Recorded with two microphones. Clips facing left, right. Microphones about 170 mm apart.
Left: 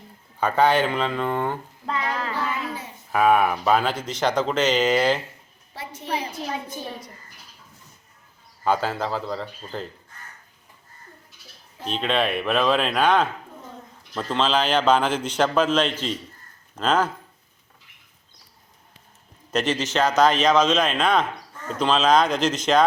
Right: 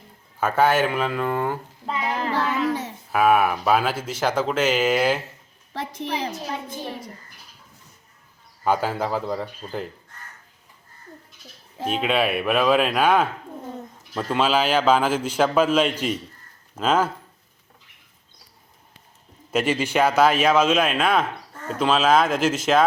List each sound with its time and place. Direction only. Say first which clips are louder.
0.3 s speech: even; 5° right (ahead or behind)
2.3 s a sound: right 6 dB; 90° right
3.1 s speech: even; 5° right (ahead or behind)
8.6 s speech: right 1 dB; 10° right (ahead or behind)
11.9 s speech: right 2 dB; 10° right (ahead or behind)
19.5 s speech: right 2 dB; 5° right (ahead or behind)